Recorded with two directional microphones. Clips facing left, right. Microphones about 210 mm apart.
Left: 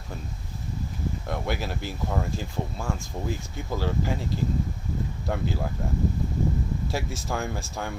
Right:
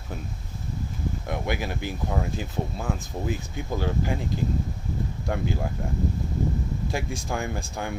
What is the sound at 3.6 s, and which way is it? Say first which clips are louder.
Speech: even; centre (ahead or behind).